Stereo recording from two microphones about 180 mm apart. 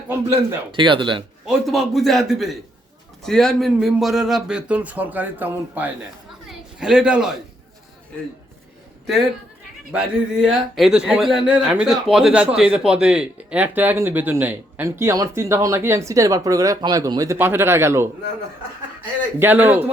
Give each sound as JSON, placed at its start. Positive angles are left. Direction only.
{"t": 0.1, "sound": "speech", "side_deg": -15}
{"t": 0.7, "sound": "speech", "side_deg": -25}
{"t": 1.5, "sound": "a man's voice", "side_deg": 0}
{"t": 9.9, "sound": "speech", "side_deg": -5}
{"t": 19.4, "sound": "speech", "side_deg": -10}